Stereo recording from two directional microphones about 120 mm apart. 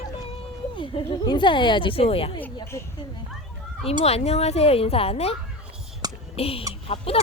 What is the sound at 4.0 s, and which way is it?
A woman's voice, 60° left (ahead or behind).